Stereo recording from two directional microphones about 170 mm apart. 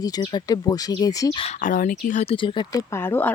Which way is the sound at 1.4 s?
45° left (ahead or behind).